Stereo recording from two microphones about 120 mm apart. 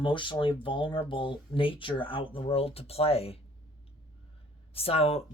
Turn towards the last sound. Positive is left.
turn(degrees=60)  # may be behind; listen again after turning